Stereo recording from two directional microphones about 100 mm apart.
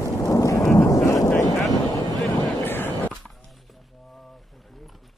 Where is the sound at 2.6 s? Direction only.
20° left (ahead or behind).